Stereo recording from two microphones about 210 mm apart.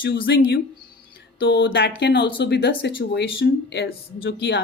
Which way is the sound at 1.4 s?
55° left (ahead or behind).